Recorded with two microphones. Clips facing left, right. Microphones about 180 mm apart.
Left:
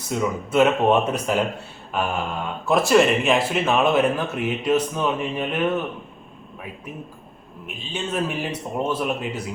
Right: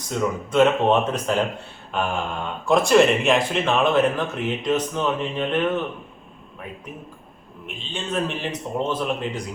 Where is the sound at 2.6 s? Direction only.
5° left (ahead or behind).